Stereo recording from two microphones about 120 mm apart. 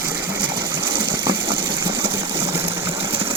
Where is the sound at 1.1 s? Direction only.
20° right (ahead or behind).